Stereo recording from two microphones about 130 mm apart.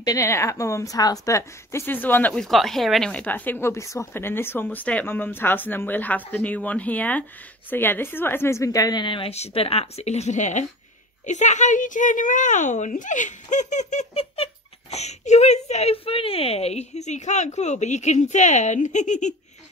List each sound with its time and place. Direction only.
0.0 s a woman's voice: 25° left (ahead or behind)
2.4 s a woman's voice: centre (ahead or behind); by 14.0 s 65° left (ahead or behind)
14.1 s a child's voice: 45° left (ahead or behind); by 19.3 s 70° left (ahead or behind)